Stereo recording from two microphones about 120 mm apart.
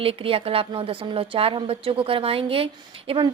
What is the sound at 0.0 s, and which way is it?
A woman's voice, 50° right (ahead or behind).